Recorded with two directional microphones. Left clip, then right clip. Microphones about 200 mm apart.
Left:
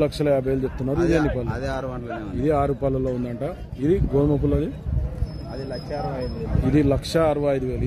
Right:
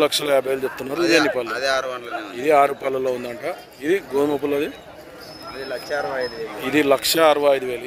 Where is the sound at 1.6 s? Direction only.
40° left (ahead or behind).